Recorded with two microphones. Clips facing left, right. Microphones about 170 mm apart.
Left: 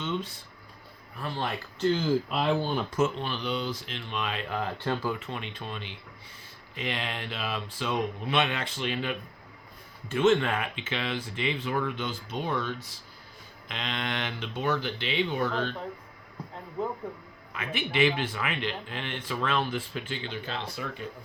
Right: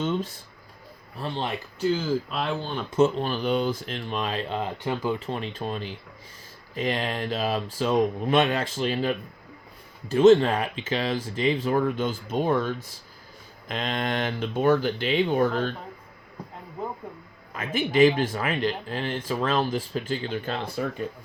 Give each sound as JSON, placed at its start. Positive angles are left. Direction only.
{"t": 1.1, "sound": "speech", "side_deg": -25}
{"t": 1.8, "sound": "speech", "side_deg": -5}
{"t": 2.9, "sound": "speech", "side_deg": -35}
{"t": 5.2, "sound": "speech", "side_deg": -35}
{"t": 17.5, "sound": "speech", "side_deg": -45}